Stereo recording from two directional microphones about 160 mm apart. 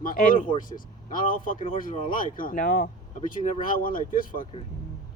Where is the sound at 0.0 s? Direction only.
60° left (ahead or behind).